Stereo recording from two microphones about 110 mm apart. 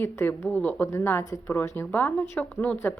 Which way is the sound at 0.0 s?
20° left (ahead or behind).